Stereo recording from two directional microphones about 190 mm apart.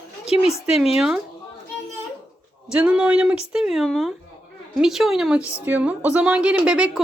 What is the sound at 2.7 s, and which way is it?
A woman's voice, 5° right (ahead or behind).